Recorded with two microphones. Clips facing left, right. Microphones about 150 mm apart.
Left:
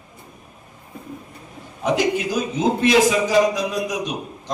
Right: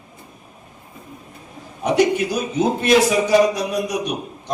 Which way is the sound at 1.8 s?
90° left.